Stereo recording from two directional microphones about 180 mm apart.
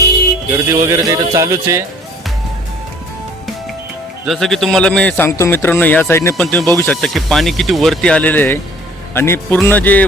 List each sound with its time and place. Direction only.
0.7 s speech: 20° right (ahead or behind)
4.3 s a man's voice: centre (ahead or behind)